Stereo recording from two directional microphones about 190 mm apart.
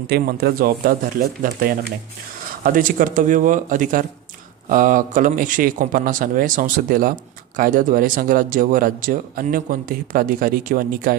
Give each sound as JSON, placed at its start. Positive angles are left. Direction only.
{"t": 0.0, "sound": "speech", "side_deg": -55}